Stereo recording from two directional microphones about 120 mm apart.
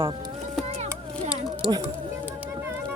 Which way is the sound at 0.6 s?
65° right (ahead or behind).